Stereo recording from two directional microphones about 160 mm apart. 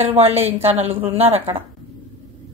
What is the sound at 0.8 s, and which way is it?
Speech, 40° right (ahead or behind).